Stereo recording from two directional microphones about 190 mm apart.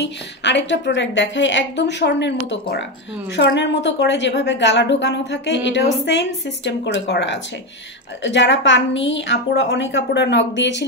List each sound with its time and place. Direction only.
0.0 s a woman's voice: 65° left (ahead or behind)